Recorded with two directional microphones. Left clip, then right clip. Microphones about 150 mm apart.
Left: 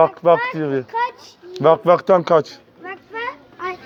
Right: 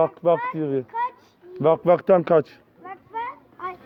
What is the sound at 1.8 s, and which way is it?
Speech, 55° right (ahead or behind).